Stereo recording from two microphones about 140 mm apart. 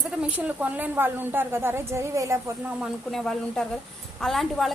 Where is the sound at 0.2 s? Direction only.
10° right (ahead or behind).